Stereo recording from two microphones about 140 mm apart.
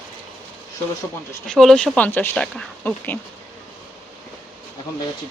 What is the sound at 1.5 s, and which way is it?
Speech, 5° left (ahead or behind).